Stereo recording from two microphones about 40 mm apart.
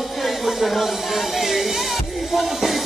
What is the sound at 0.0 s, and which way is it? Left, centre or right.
Music, centre.